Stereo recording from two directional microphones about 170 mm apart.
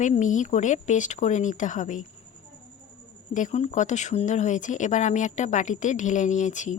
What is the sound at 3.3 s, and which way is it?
Speech, 45° left (ahead or behind).